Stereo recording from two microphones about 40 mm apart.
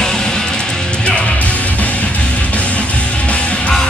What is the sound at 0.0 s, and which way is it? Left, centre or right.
Music, centre.